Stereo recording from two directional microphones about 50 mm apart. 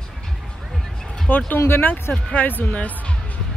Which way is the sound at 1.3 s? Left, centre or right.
Left.